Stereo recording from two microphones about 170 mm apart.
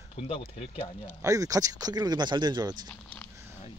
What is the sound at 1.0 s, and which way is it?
Speech, 20° right (ahead or behind).